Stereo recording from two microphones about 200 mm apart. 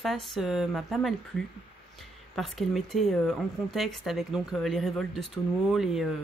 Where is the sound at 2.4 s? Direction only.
Centre (ahead or behind).